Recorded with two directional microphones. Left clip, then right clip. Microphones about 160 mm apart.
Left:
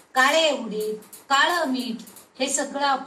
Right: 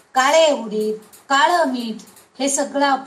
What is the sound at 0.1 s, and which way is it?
A woman's voice, 30° right (ahead or behind).